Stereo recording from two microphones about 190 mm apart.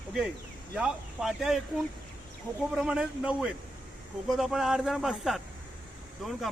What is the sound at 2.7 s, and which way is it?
Speech, 5° right (ahead or behind).